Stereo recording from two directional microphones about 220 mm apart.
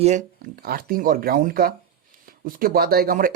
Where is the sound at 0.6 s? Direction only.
40° right (ahead or behind).